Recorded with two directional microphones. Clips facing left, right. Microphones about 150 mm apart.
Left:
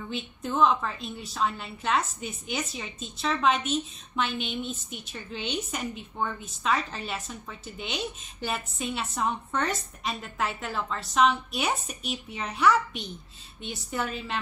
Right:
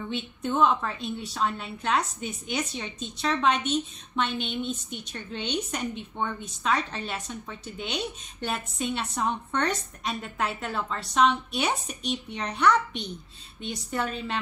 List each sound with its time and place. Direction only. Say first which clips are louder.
0.1 s a woman's voice: right 2 dB; centre (ahead or behind)